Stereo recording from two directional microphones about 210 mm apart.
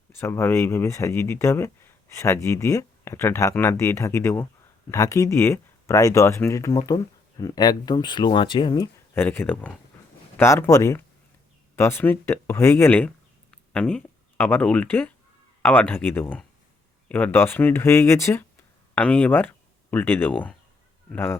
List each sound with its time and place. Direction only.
0.1 s speech: 10° left (ahead or behind)